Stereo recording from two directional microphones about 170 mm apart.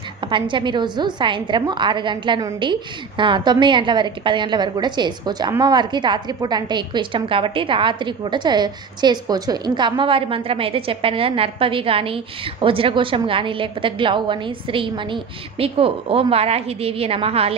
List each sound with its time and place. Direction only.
0.2 s a woman's voice: 30° right (ahead or behind)